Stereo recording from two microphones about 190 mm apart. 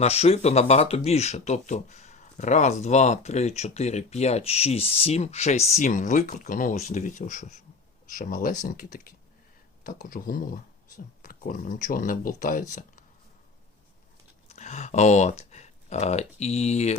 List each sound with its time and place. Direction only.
0.0 s speech: 35° left (ahead or behind)
14.4 s speech: 35° left (ahead or behind)